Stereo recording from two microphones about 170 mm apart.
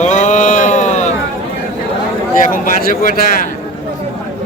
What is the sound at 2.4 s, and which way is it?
A man's voice, 55° left (ahead or behind).